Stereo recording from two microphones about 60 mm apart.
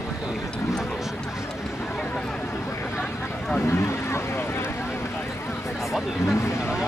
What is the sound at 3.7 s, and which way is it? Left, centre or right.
Vehicle, left.